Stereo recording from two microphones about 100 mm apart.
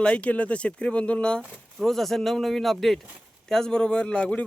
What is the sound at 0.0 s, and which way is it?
Speech, 10° left (ahead or behind).